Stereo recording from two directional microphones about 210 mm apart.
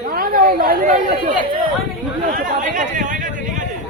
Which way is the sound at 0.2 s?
45° right (ahead or behind).